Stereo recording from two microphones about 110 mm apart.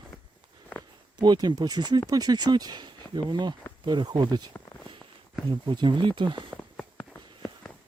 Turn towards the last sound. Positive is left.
turn(degrees=10)  # may be behind; listen again after turning